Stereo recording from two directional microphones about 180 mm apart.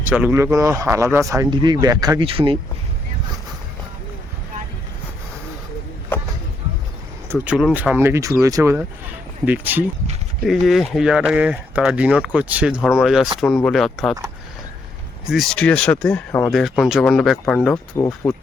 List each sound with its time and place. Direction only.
0.0 s speech: 10° right (ahead or behind); by 2.6 s 30° right (ahead or behind)
7.3 s speech: 5° right (ahead or behind)
15.3 s speech: centre (ahead or behind)
17.9 s speech: 15° left (ahead or behind)